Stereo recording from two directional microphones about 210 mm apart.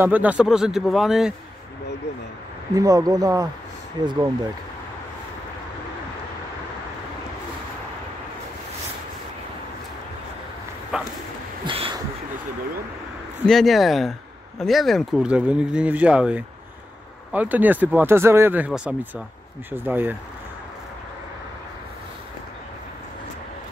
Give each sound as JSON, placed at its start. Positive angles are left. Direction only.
{"t": 0.0, "sound": "speech", "side_deg": -10}
{"t": 2.7, "sound": "speech", "side_deg": -15}
{"t": 10.9, "sound": "a sound", "side_deg": -5}
{"t": 11.6, "sound": "a sound", "side_deg": -25}
{"t": 13.5, "sound": "speech", "side_deg": 0}
{"t": 19.7, "sound": "speech", "side_deg": -10}